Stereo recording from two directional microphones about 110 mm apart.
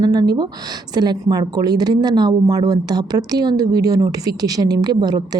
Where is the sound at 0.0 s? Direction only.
40° right (ahead or behind).